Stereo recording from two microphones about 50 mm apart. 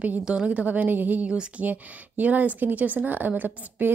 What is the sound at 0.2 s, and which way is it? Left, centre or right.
A woman's voice, right.